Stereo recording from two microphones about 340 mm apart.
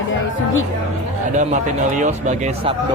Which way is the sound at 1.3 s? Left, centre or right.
Right.